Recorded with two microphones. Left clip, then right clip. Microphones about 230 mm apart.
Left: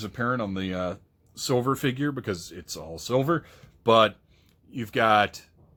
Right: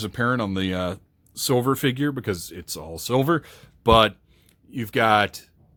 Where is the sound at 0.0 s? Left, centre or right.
Right.